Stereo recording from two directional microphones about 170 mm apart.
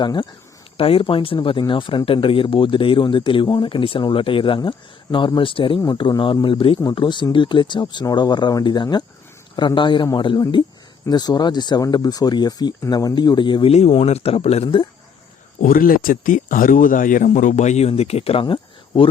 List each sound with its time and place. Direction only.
0.0 s speech: 25° left (ahead or behind)
15.6 s speech: 55° left (ahead or behind); by 19.0 s 30° left (ahead or behind)